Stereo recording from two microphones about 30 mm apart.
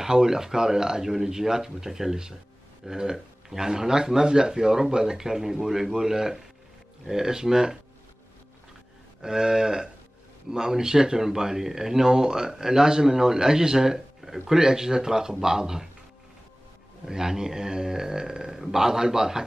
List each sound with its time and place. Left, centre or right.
0.0 s speech: centre
9.2 s speech: right
17.0 s speech: centre